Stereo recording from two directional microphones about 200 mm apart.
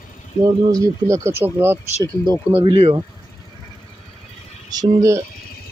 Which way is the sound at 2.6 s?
30° right (ahead or behind).